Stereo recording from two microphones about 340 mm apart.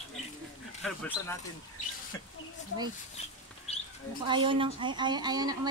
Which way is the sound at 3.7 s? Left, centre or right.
Centre.